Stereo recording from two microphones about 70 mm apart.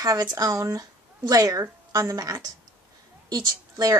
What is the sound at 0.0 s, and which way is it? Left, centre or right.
A woman's voice, right.